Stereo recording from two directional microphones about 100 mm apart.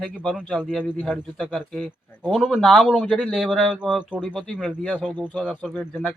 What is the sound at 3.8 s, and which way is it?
Speech, 10° right (ahead or behind).